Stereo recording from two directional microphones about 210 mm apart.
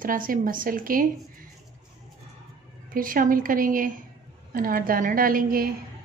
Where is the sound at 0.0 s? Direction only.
40° right (ahead or behind).